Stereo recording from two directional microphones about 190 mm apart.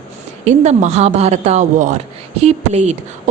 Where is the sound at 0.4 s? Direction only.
35° right (ahead or behind).